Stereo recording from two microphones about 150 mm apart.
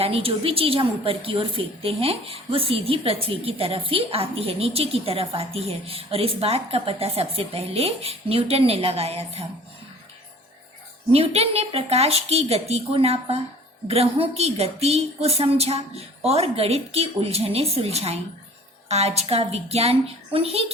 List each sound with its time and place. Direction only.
0.0 s a woman's voice: 40° right (ahead or behind)
11.1 s speech: 45° right (ahead or behind)